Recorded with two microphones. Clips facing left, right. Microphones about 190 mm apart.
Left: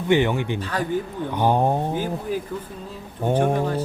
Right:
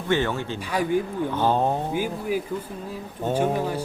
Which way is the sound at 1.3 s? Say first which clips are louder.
Left 3 dB; 15° left (ahead or behind).